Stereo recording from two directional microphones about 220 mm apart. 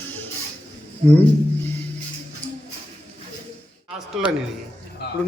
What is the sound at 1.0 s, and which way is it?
Speech, 30° right (ahead or behind).